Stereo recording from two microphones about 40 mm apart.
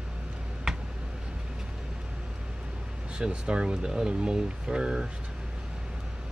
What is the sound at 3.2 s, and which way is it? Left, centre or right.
Speech, right.